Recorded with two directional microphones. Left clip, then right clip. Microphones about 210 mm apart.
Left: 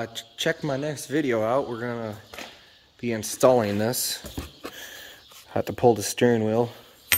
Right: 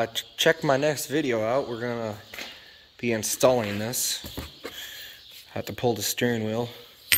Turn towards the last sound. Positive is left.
turn(degrees=20)  # may be behind; listen again after turning